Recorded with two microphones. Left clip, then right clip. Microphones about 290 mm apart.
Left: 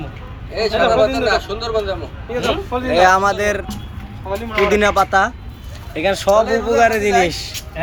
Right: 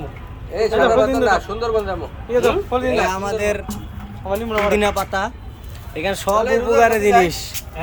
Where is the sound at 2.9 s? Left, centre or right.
Centre.